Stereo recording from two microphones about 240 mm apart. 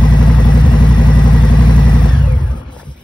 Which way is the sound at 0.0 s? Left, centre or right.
Centre.